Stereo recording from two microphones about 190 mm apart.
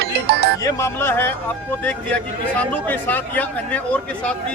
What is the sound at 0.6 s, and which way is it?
Speech, 15° left (ahead or behind).